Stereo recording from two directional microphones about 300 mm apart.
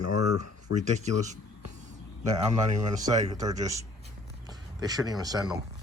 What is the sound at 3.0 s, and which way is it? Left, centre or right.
Speech, centre.